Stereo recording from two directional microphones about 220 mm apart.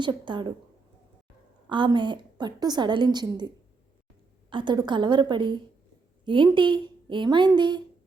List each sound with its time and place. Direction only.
0.0 s a woman's voice: 20° right (ahead or behind)
1.7 s a woman's voice: 20° right (ahead or behind)